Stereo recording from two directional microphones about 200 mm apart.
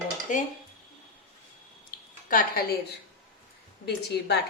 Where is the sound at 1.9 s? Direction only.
45° left (ahead or behind).